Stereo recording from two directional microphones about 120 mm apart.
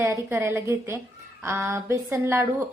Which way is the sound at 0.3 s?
20° right (ahead or behind).